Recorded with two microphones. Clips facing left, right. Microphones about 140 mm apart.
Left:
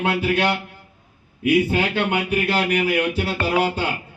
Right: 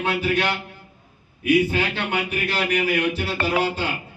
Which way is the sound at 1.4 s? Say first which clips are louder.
Left 1 dB; 55° left (ahead or behind).